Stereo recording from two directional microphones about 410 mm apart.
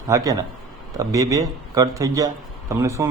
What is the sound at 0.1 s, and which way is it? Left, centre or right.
A man's voice, centre.